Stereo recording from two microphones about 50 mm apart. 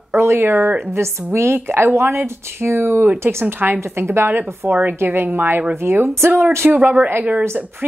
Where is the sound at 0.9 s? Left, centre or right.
Right.